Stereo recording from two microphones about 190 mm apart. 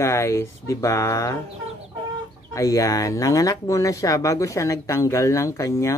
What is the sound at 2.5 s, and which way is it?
Speech, 15° left (ahead or behind).